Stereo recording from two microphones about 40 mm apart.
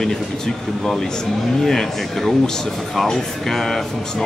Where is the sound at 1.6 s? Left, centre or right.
Centre.